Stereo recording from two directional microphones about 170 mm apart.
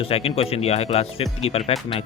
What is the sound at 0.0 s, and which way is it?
Speech, 35° left (ahead or behind).